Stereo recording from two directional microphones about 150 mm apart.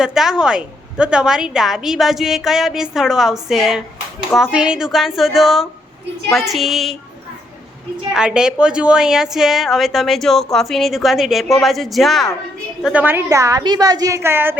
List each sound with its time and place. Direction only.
0.0 s a woman's voice: 5° right (ahead or behind)
8.1 s a woman's voice: 5° right (ahead or behind)
12.8 s a woman's voice: 10° right (ahead or behind)